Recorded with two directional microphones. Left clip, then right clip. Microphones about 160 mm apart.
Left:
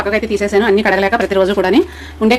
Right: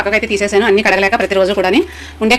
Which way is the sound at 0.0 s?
Centre (ahead or behind).